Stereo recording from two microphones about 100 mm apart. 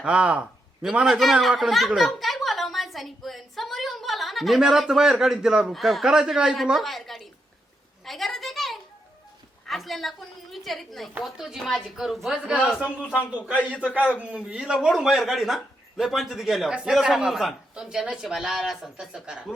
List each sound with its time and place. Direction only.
0.0 s a woman's voice: 10° right (ahead or behind)
8.0 s a sound: centre (ahead or behind)
9.6 s a woman's voice: centre (ahead or behind)